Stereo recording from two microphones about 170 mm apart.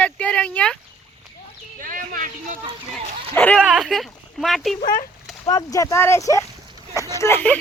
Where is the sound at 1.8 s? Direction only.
55° right (ahead or behind).